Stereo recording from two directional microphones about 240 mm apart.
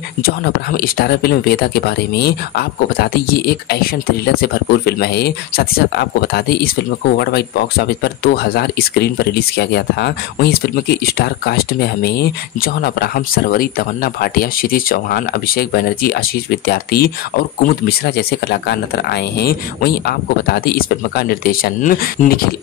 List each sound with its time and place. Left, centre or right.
0.2 s speech: left